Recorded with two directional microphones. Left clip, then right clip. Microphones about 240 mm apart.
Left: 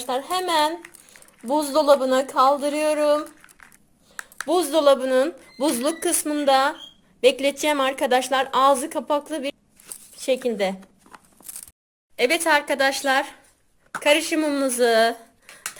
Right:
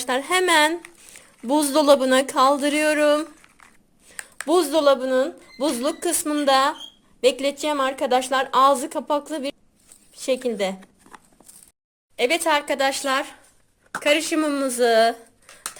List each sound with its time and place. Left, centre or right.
0.0 s speech: right
4.4 s a woman's voice: centre
4.8 s a woman's voice: centre